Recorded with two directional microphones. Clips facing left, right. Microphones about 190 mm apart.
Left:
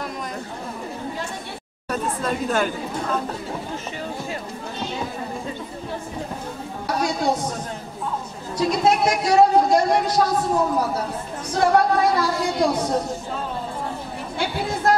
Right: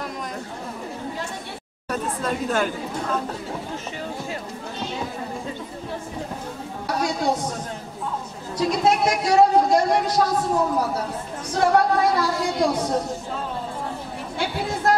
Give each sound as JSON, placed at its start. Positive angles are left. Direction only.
{"t": 1.9, "sound": "speech", "side_deg": 15}
{"t": 6.9, "sound": "speech", "side_deg": 20}
{"t": 8.6, "sound": "speech", "side_deg": 15}
{"t": 10.2, "sound": "a woman's voice", "side_deg": 25}
{"t": 11.5, "sound": "speech", "side_deg": 10}
{"t": 12.6, "sound": "a woman's voice", "side_deg": 25}
{"t": 14.4, "sound": "chatter", "side_deg": 10}